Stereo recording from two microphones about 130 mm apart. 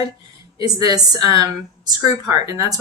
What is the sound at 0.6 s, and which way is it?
A woman's voice, 30° right (ahead or behind).